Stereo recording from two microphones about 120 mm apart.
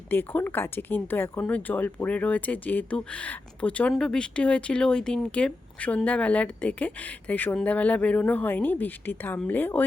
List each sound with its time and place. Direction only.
0.1 s speech: 15° left (ahead or behind)